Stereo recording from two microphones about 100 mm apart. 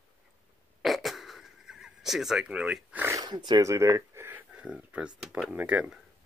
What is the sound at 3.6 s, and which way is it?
Speech, 30° right (ahead or behind).